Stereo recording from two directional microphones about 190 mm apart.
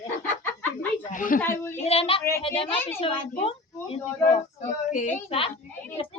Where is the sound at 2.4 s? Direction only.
30° left (ahead or behind).